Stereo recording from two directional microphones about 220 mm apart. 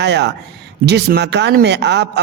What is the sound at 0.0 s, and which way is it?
A man's voice, 50° right (ahead or behind).